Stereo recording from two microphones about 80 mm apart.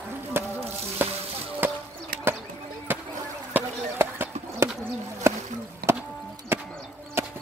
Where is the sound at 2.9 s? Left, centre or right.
Right.